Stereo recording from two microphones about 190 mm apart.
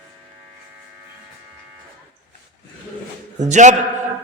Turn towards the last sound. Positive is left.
turn(degrees=-40)  # may be behind; listen again after turning